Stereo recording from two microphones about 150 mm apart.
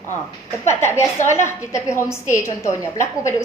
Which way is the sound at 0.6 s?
15° left (ahead or behind).